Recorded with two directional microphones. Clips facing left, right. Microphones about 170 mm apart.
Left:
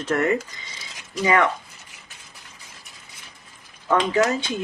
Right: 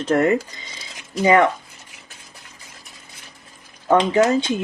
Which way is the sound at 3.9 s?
25° right (ahead or behind).